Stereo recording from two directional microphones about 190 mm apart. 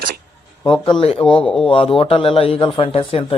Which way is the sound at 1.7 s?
30° left (ahead or behind).